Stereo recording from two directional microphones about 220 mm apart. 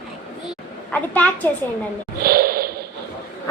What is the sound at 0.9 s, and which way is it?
Speech, 5° left (ahead or behind).